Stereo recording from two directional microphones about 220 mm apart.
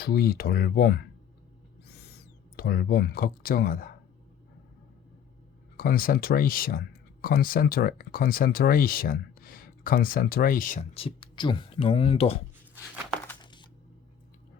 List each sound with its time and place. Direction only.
0.0 s speech: 45° left (ahead or behind)
5.7 s speech: 40° left (ahead or behind)
13.4 s a sound: 20° left (ahead or behind)